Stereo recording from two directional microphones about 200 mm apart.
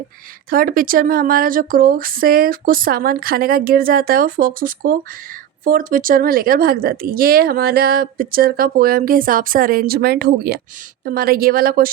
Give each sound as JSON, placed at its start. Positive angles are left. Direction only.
{"t": 0.5, "sound": "speech", "side_deg": -45}